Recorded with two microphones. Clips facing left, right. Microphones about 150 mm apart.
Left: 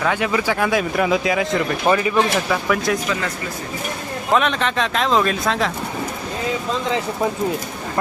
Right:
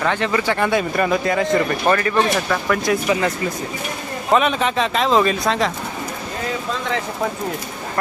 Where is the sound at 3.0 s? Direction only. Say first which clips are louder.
Right 5 dB; 20° right (ahead or behind).